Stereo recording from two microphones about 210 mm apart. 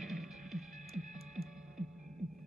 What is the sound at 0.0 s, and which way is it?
Music, centre (ahead or behind).